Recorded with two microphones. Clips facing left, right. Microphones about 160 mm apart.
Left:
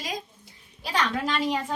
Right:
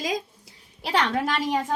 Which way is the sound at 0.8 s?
60° right (ahead or behind).